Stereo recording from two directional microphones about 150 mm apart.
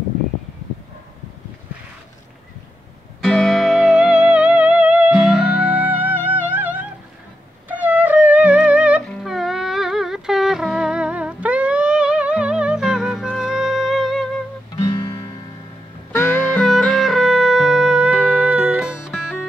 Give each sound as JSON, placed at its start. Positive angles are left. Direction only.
{"t": 3.2, "sound": "music", "side_deg": 0}
{"t": 14.8, "sound": "music", "side_deg": 25}
{"t": 16.1, "sound": "music", "side_deg": 15}